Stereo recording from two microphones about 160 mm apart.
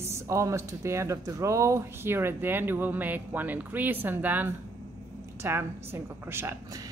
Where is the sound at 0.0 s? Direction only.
15° right (ahead or behind).